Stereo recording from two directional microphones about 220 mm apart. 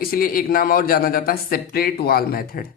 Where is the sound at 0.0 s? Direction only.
40° left (ahead or behind).